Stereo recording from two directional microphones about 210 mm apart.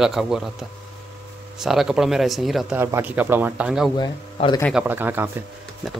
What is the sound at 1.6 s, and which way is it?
Speech, centre (ahead or behind).